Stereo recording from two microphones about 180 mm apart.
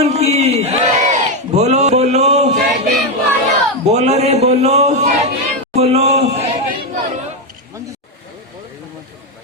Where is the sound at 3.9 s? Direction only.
35° right (ahead or behind).